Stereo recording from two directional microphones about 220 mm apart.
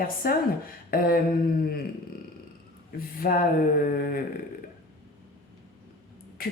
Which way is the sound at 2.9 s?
40° left (ahead or behind).